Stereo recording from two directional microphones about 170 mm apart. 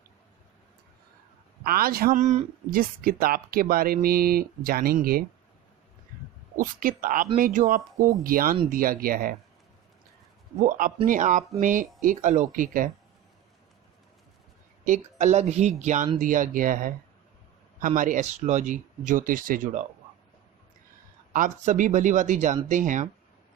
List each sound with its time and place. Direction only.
1.6 s speech: 60° right (ahead or behind)
2.6 s speech: 60° right (ahead or behind)
6.6 s speech: 55° right (ahead or behind)
10.6 s speech: 50° right (ahead or behind)
14.8 s speech: 45° right (ahead or behind)
21.3 s speech: 50° right (ahead or behind)